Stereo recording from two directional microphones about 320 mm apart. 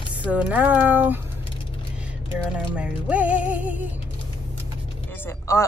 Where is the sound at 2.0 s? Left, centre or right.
Centre.